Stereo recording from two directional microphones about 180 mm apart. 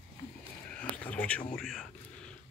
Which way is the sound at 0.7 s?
5° left (ahead or behind).